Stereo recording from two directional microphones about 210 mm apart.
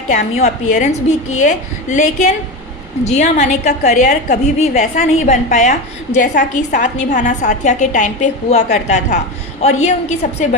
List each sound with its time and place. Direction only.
0.1 s a woman's voice: 35° left (ahead or behind)